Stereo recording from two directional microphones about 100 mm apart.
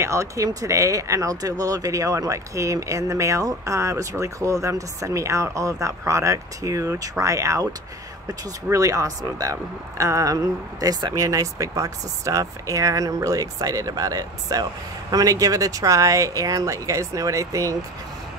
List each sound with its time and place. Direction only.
0.0 s speech: 30° right (ahead or behind)
8.6 s speech: 35° right (ahead or behind)